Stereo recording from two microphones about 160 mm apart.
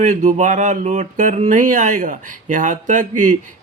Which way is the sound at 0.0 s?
50° right (ahead or behind).